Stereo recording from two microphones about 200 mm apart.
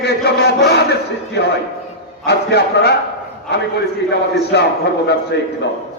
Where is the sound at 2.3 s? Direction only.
55° left (ahead or behind).